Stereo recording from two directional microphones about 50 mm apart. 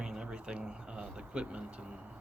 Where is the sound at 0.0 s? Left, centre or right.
Centre.